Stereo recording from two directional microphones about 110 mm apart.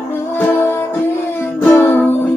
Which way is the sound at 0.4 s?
20° left (ahead or behind).